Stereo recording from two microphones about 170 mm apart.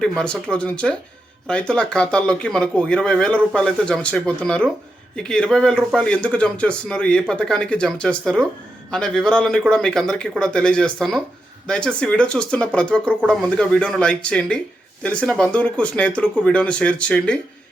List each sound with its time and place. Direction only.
0.0 s speech: 5° left (ahead or behind)